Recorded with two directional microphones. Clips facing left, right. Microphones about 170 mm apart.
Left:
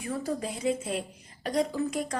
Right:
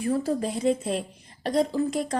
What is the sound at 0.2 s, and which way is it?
A woman's voice, 35° right (ahead or behind).